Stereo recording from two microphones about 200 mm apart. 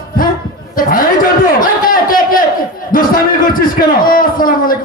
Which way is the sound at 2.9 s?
45° left (ahead or behind).